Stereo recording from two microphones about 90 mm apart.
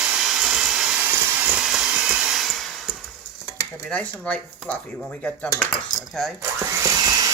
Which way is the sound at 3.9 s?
10° left (ahead or behind).